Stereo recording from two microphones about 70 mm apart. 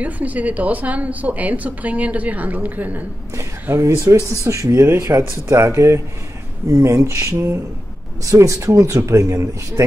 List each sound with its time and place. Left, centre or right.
0.0 s a woman's voice: right
3.8 s speech: right
8.2 s speech: right